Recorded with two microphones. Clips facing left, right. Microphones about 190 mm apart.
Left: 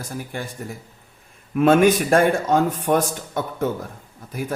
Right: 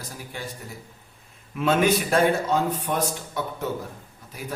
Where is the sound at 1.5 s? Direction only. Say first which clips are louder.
Left 6 dB; 50° left (ahead or behind).